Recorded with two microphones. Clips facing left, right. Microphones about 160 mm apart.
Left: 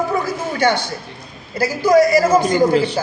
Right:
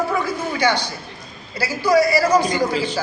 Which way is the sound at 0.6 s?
50° left (ahead or behind).